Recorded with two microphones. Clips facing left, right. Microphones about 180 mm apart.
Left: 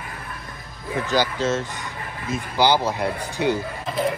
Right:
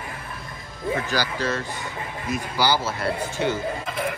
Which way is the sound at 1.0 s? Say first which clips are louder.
Left 4 dB; 20° left (ahead or behind).